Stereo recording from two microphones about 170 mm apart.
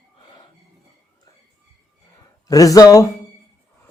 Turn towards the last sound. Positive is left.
turn(degrees=20)  # may be behind; listen again after turning